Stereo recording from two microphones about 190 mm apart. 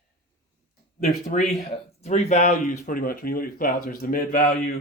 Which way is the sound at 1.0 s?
35° left (ahead or behind).